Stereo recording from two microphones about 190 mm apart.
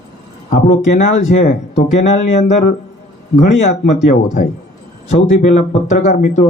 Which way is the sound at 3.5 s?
40° left (ahead or behind).